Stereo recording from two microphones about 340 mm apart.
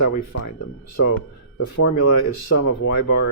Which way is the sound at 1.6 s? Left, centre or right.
Left.